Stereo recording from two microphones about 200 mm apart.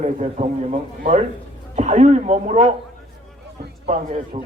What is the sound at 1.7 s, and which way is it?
Speech, 35° right (ahead or behind).